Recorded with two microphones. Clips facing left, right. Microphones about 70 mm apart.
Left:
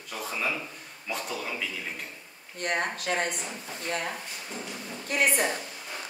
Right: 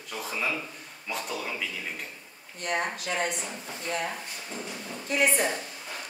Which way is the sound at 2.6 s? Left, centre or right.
Left.